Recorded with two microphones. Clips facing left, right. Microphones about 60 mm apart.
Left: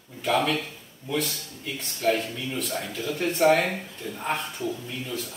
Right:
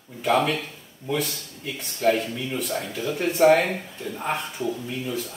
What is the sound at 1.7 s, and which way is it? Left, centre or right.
Speech, centre.